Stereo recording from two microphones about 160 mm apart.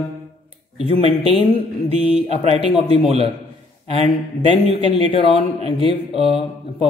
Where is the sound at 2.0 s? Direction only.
35° left (ahead or behind).